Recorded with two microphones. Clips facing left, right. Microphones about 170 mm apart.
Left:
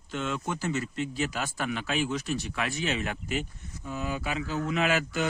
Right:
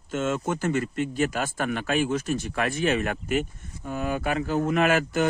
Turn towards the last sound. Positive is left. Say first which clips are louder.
# right 5 dB
turn(degrees=-50)  # may be behind; listen again after turning